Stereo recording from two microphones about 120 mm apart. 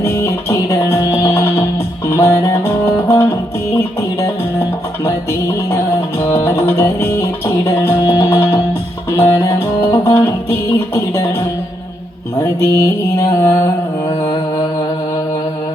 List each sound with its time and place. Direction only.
0.0 s music: 25° left (ahead or behind)
5.7 s music: 25° left (ahead or behind)
12.4 s mantra: 25° left (ahead or behind)